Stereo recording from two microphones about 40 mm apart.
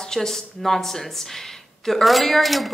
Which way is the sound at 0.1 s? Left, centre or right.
Centre.